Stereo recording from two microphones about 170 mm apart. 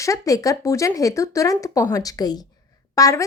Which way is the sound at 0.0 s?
20° left (ahead or behind).